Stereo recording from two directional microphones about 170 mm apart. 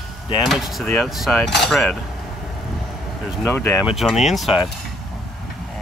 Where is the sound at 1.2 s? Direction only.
5° left (ahead or behind).